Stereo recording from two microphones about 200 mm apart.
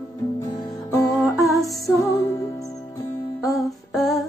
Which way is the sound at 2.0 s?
15° left (ahead or behind).